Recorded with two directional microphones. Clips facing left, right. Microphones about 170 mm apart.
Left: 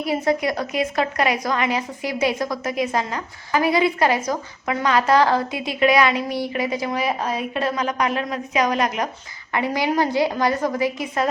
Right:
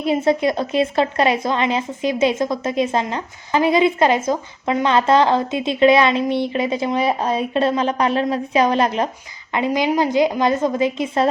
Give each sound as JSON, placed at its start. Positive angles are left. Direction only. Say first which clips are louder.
{"t": 0.0, "sound": "a woman's voice", "louder": "right 4 dB", "side_deg": -25}